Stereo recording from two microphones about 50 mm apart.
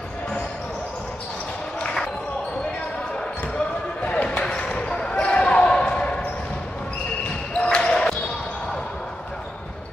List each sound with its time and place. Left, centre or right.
3.5 s basketball bounce: left
7.5 s basketball bounce: left